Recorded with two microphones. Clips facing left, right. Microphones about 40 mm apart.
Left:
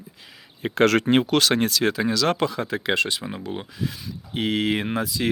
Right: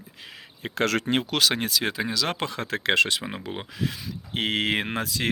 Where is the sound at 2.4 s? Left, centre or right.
Right.